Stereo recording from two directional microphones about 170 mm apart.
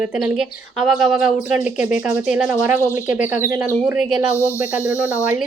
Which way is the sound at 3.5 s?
5° right (ahead or behind).